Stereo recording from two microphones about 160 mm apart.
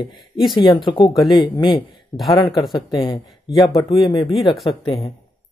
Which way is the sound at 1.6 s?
30° left (ahead or behind).